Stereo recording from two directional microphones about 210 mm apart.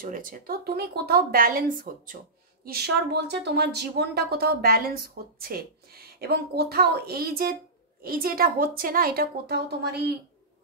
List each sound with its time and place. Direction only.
0.0 s a woman's voice: 40° right (ahead or behind)